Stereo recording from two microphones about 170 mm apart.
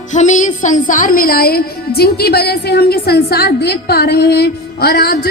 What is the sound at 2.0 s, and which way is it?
A woman's voice, 65° left (ahead or behind).